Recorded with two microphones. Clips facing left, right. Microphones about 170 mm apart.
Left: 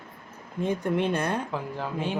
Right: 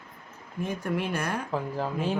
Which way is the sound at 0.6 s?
20° left (ahead or behind).